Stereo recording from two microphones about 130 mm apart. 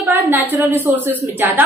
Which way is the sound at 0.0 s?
20° right (ahead or behind).